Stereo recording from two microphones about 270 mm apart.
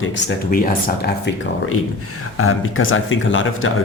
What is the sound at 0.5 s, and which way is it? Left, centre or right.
Speech, left.